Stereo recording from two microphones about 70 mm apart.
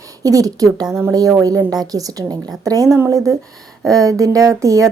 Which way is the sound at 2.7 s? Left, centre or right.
Right.